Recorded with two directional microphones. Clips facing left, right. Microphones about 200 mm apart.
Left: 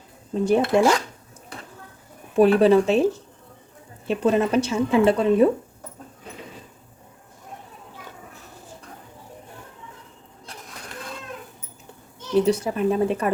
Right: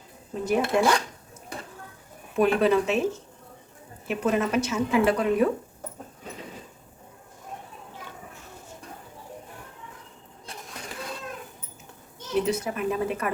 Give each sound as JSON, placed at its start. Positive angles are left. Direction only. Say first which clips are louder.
{"t": 0.4, "sound": "speech", "louder": "left 5 dB", "side_deg": 30}
{"t": 2.3, "sound": "speech", "louder": "left 6 dB", "side_deg": 35}
{"t": 12.5, "sound": "speech", "louder": "left 6 dB", "side_deg": 30}